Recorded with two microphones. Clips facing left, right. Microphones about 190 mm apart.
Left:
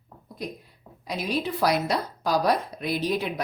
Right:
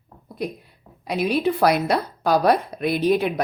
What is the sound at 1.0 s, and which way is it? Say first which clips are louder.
A woman's voice: right 7 dB; 60° right (ahead or behind).